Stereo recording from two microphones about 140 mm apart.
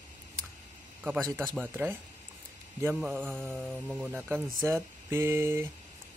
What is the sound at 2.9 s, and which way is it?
Speech, 5° right (ahead or behind).